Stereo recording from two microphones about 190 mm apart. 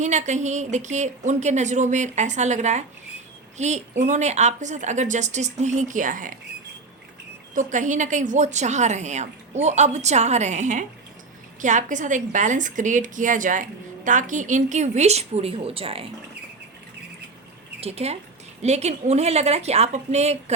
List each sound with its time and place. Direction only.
0.0 s a woman's voice: 40° right (ahead or behind)
7.5 s a woman's voice: 40° right (ahead or behind)
17.7 s a woman's voice: 30° right (ahead or behind)